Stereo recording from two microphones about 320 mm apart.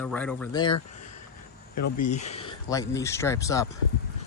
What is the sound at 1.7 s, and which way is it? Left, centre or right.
Speech, left.